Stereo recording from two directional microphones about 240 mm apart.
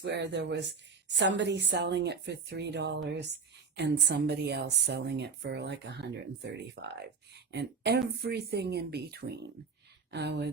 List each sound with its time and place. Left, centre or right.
0.0 s speech: right